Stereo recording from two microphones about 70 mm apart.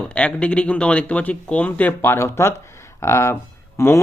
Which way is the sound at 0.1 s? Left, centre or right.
Centre.